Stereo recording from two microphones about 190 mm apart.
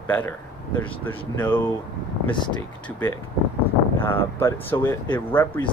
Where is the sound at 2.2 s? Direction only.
25° left (ahead or behind).